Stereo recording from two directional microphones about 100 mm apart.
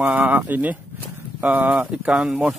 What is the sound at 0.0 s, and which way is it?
Speech, 15° right (ahead or behind).